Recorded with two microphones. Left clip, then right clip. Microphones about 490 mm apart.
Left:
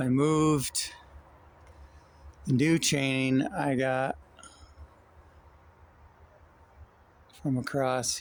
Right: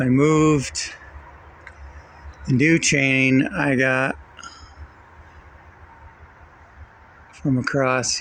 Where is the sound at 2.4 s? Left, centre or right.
Left.